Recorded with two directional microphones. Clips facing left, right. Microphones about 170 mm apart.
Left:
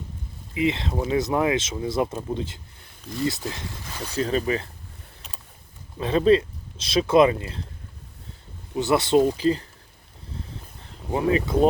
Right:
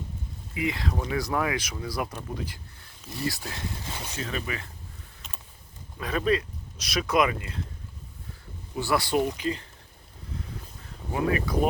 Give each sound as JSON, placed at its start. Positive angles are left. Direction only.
{"t": 0.5, "sound": "speech", "side_deg": 25}
{"t": 4.1, "sound": "speech", "side_deg": 35}
{"t": 6.0, "sound": "speech", "side_deg": 25}
{"t": 8.7, "sound": "speech", "side_deg": 20}
{"t": 10.3, "sound": "a sound", "side_deg": 30}
{"t": 11.1, "sound": "speech", "side_deg": 25}